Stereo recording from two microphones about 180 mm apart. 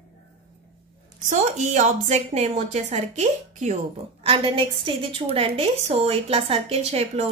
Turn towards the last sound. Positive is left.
turn(degrees=-35)  # may be behind; listen again after turning